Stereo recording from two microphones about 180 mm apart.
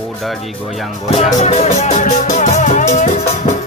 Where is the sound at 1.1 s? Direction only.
35° left (ahead or behind).